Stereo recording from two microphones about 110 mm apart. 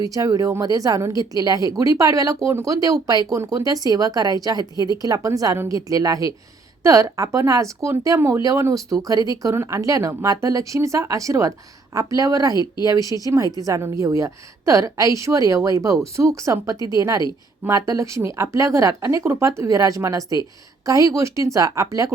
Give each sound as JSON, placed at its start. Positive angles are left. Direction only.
{"t": 0.0, "sound": "a woman's voice", "side_deg": -35}